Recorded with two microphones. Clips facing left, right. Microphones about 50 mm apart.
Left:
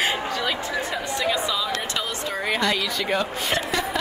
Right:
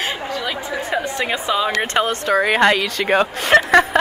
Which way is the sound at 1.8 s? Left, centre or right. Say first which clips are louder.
Right 9 dB; right.